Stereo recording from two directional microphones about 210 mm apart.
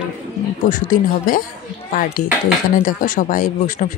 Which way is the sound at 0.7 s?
40° left (ahead or behind).